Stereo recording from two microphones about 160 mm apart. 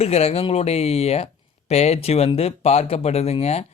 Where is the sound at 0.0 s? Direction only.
40° left (ahead or behind).